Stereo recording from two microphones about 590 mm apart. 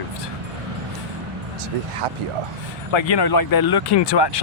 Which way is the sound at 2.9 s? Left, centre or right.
Left.